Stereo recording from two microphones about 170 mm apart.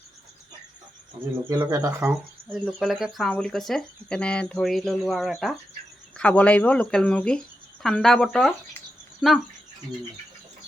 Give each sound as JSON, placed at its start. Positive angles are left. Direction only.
{"t": 1.5, "sound": "speech", "side_deg": -20}
{"t": 2.0, "sound": "speech", "side_deg": 0}